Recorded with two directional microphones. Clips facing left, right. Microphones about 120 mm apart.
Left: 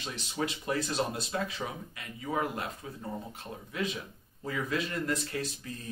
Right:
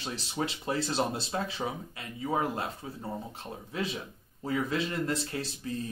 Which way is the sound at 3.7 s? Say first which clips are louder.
Even; 30° right (ahead or behind).